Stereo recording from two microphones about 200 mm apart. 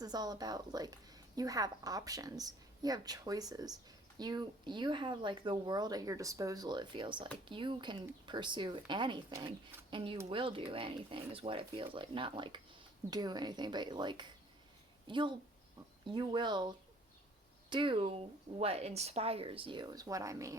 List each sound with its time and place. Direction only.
0.0 s a woman's voice: 20° right (ahead or behind)